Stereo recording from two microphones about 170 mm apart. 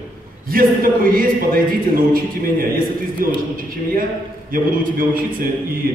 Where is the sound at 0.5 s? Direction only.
55° right (ahead or behind).